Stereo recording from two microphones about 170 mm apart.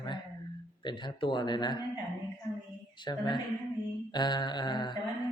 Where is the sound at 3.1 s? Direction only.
25° left (ahead or behind).